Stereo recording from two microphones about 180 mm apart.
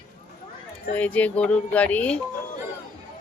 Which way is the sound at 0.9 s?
10° left (ahead or behind).